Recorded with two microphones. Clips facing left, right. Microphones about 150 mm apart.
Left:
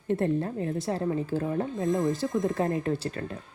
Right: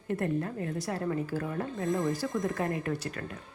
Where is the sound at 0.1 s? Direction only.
30° left (ahead or behind).